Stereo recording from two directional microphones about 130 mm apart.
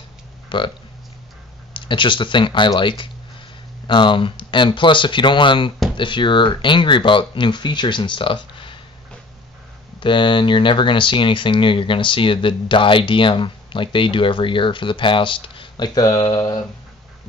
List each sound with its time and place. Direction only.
0.5 s speech: 40° left (ahead or behind)
1.7 s speech: 40° left (ahead or behind)
9.9 s speech: 40° left (ahead or behind)